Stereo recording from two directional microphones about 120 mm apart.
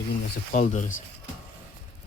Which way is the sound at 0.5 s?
80° left.